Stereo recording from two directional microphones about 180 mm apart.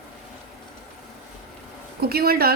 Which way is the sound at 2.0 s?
60° right (ahead or behind).